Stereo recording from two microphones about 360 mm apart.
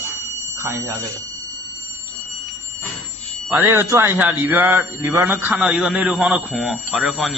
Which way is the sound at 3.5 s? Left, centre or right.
Centre.